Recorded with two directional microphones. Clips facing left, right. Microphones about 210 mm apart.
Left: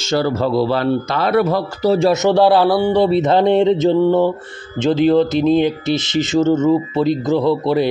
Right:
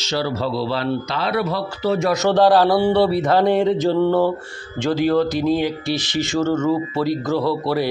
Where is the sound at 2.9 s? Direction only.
20° left (ahead or behind).